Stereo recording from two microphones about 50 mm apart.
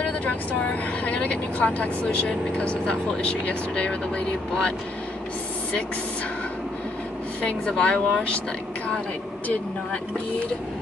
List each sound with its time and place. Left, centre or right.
0.0 s vehicle: left
1.0 s speech: left
7.4 s speech: left